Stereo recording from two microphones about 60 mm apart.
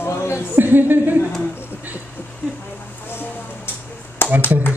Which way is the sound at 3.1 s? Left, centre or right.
Left.